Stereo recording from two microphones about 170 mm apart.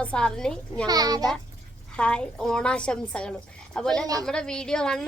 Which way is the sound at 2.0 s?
5° left (ahead or behind).